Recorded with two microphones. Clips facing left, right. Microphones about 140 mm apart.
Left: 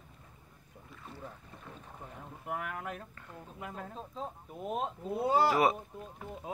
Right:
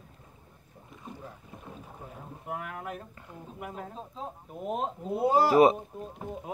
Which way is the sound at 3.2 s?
15° right (ahead or behind).